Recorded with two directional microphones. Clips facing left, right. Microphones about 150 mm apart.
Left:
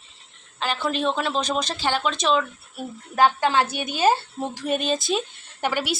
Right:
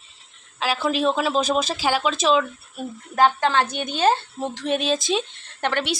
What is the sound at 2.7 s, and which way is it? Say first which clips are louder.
A woman's voice: right 1 dB; 10° left (ahead or behind).